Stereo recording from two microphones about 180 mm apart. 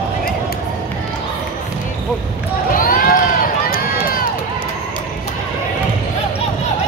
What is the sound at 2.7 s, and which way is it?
Run, 50° left (ahead or behind).